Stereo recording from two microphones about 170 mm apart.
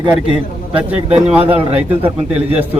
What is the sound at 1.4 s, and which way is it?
Speech, 35° right (ahead or behind).